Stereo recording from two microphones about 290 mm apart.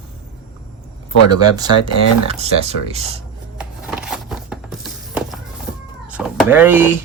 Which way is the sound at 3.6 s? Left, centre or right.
Centre.